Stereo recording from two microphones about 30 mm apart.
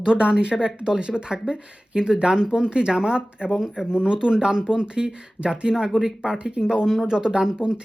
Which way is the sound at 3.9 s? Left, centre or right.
Right.